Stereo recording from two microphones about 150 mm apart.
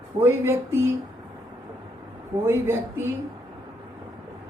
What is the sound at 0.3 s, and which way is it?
Speech, 15° right (ahead or behind).